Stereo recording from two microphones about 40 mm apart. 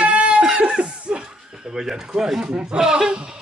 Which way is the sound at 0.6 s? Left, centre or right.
Right.